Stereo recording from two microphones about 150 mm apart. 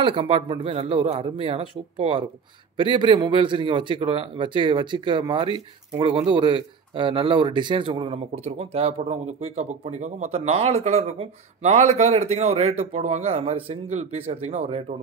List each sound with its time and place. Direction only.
0.0 s a man's voice: 35° right (ahead or behind)